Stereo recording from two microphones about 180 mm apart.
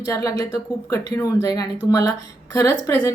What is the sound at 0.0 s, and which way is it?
Speech, 20° left (ahead or behind).